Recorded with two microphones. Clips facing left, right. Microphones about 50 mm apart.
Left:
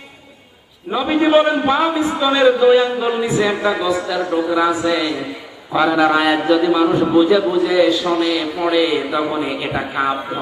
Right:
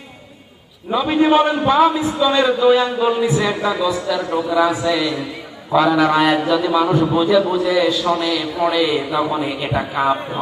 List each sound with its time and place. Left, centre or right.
0.9 s a man's voice: centre
4.2 s a man's voice: left
4.5 s a man's voice: centre
8.0 s a man's voice: centre